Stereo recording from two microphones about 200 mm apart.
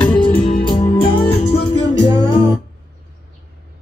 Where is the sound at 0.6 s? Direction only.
25° left (ahead or behind).